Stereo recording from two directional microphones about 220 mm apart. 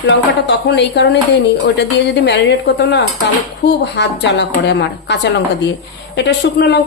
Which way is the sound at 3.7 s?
50° left (ahead or behind).